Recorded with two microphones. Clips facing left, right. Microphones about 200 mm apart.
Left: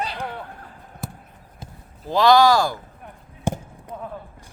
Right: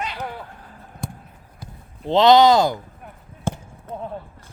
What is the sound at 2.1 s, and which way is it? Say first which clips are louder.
Speech: right 2 dB; 20° right (ahead or behind).